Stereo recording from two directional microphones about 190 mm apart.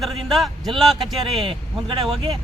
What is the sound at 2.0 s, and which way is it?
Speech, 30° right (ahead or behind).